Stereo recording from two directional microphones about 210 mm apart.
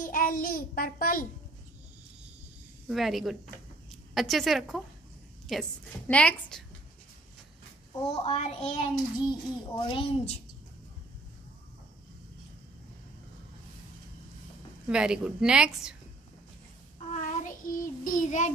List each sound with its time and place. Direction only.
0.0 s a child's voice: 40° left (ahead or behind)
2.9 s a woman's voice: centre (ahead or behind)
8.2 s a child's voice: 30° left (ahead or behind)
14.9 s a woman's voice: 5° right (ahead or behind)
17.1 s child singing: 40° left (ahead or behind)